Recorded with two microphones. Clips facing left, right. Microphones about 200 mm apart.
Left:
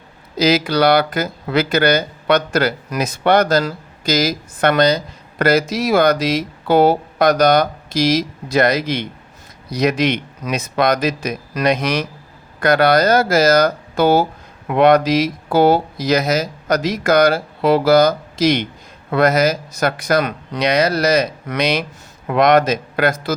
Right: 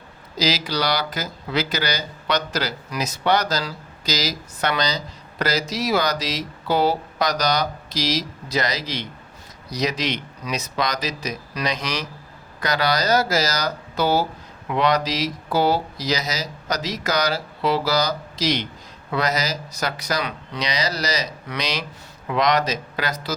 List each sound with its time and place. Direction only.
0.3 s speech: 55° left (ahead or behind)